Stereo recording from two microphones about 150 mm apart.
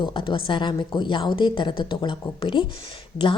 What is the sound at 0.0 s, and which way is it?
A woman's voice, 35° left (ahead or behind).